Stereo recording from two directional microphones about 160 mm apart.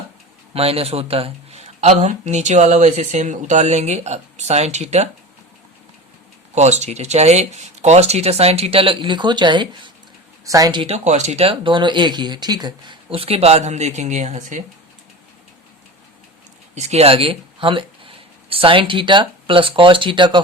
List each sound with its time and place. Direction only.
0.5 s speech: 35° right (ahead or behind)
6.5 s speech: 45° right (ahead or behind); by 10.9 s 30° right (ahead or behind)
10.9 s speech: 45° right (ahead or behind)
16.7 s speech: 45° right (ahead or behind)